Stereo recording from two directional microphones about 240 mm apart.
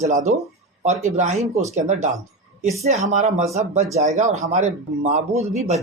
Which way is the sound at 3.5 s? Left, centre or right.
Right.